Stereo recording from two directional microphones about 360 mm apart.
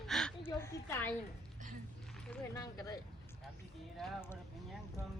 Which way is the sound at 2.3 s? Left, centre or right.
Centre.